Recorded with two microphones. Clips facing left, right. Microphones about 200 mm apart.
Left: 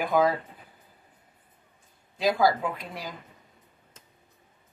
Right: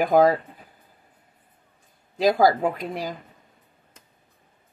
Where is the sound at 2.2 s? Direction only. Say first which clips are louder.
Right 5 dB; 45° right (ahead or behind).